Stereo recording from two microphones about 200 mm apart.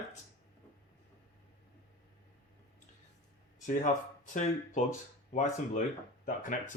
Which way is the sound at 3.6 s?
40° left (ahead or behind).